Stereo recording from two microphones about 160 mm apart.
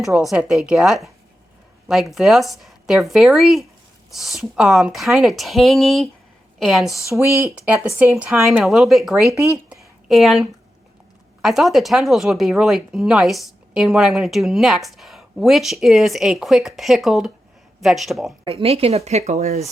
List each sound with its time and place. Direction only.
0.0 s speech: centre (ahead or behind)
7.1 s speech: 15° right (ahead or behind); by 9.3 s centre (ahead or behind)
9.3 s speech: 20° right (ahead or behind)
10.1 s speech: centre (ahead or behind)
18.4 s speech: 35° right (ahead or behind)